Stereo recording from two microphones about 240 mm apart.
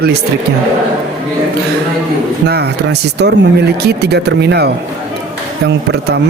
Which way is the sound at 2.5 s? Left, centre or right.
Right.